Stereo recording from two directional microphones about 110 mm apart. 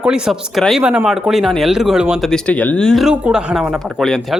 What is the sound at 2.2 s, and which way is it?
Speech, 10° left (ahead or behind).